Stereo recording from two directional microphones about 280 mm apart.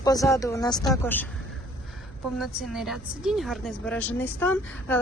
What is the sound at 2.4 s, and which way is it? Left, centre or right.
A woman's voice, centre.